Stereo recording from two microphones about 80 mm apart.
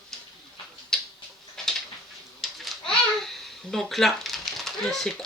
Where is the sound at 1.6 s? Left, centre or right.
Centre.